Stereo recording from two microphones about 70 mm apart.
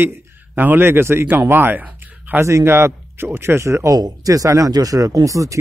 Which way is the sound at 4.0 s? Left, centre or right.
Right.